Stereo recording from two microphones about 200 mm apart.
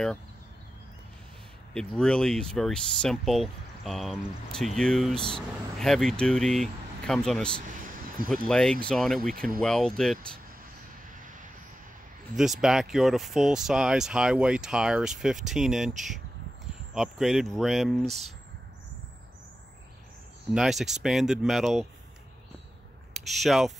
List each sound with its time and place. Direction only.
1.7 s speech: 5° left (ahead or behind)
7.8 s a sound: 45° right (ahead or behind)
8.5 s speech: 5° left (ahead or behind)
11.1 s vehicle: 40° right (ahead or behind)
12.4 s speech: centre (ahead or behind)
16.9 s speech: centre (ahead or behind)
20.5 s speech: centre (ahead or behind)
23.2 s speech: centre (ahead or behind)